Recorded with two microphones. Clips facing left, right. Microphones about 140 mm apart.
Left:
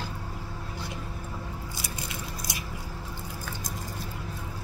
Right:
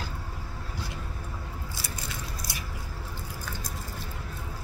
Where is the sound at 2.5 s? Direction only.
15° left (ahead or behind).